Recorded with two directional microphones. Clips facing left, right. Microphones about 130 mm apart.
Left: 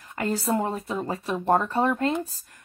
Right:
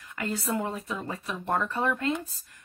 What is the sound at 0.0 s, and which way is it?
Speech, 35° left (ahead or behind).